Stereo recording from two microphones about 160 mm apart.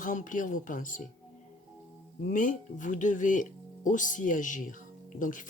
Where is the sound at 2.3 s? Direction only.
55° left (ahead or behind).